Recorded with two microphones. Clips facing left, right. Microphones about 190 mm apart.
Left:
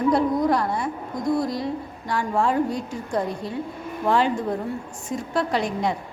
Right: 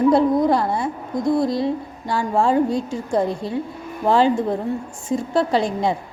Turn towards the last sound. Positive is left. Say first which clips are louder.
# right 4 dB
turn(degrees=-30)  # may be behind; listen again after turning